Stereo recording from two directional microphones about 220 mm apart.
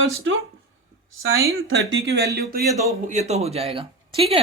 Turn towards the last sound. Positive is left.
turn(degrees=-25)  # may be behind; listen again after turning